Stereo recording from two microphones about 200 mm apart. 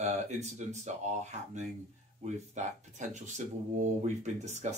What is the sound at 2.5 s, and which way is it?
Speech, 35° right (ahead or behind).